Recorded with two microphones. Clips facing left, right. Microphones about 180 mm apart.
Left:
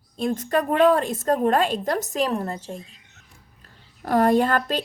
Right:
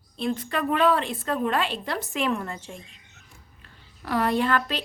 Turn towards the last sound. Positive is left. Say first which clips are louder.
# left 4 dB
turn(degrees=45)  # may be behind; listen again after turning